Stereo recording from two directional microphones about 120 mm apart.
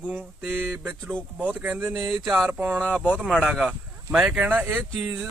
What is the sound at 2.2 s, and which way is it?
Speech, 5° right (ahead or behind).